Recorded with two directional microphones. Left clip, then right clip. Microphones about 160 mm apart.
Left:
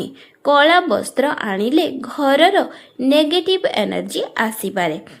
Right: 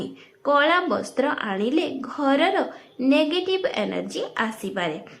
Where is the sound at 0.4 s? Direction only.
40° left (ahead or behind).